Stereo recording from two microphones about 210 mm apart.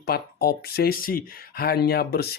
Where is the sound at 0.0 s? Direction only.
45° left (ahead or behind).